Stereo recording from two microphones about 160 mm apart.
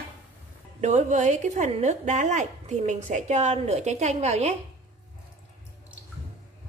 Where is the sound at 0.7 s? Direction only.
45° right (ahead or behind).